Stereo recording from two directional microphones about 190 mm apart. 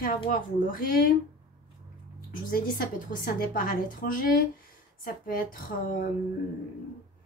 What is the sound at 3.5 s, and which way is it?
A woman's voice, 45° left (ahead or behind).